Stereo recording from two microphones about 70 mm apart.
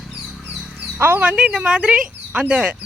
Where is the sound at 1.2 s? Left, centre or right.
Centre.